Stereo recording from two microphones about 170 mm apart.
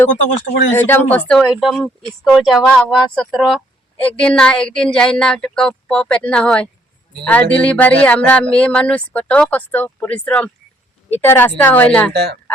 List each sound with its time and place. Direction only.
0.7 s speech: 10° left (ahead or behind)
12.1 s speech: 75° right (ahead or behind)